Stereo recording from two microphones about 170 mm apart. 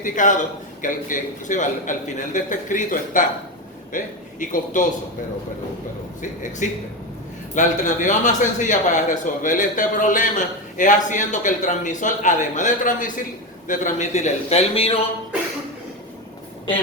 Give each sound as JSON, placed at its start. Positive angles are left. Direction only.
{"t": 0.0, "sound": "a man's voice", "side_deg": 50}
{"t": 6.6, "sound": "a man's voice", "side_deg": 45}